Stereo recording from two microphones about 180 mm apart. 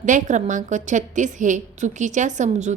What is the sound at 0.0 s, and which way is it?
A woman's voice, 45° right (ahead or behind).